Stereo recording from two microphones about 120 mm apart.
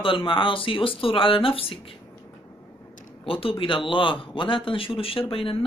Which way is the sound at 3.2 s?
50° left (ahead or behind).